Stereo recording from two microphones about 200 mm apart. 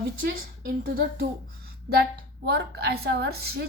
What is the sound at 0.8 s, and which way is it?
Speech, 50° right (ahead or behind).